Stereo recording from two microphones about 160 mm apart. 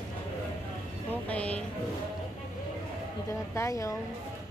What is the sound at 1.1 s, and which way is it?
Music, 10° left (ahead or behind).